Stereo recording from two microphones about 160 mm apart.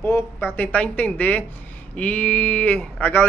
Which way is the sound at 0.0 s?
15° left (ahead or behind).